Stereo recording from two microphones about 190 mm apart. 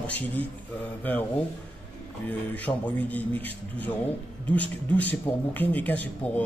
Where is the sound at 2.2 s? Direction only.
10° left (ahead or behind).